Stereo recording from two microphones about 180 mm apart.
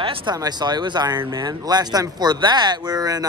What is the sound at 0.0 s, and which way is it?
Speech, 30° right (ahead or behind).